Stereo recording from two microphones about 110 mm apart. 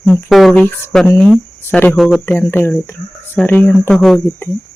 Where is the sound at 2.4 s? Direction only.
20° left (ahead or behind).